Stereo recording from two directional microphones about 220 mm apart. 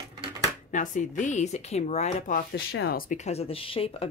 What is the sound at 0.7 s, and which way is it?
Speech, 35° left (ahead or behind).